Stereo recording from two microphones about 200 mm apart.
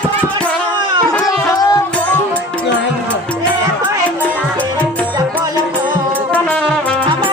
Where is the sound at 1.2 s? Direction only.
20° left (ahead or behind).